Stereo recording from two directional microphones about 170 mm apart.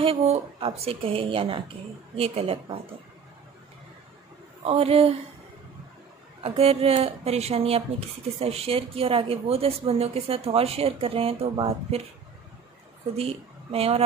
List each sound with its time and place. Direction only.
0.0 s a woman's voice: 35° right (ahead or behind)
4.6 s a woman's voice: 35° right (ahead or behind)
6.4 s a woman's voice: 35° right (ahead or behind)
13.1 s a woman's voice: 35° right (ahead or behind)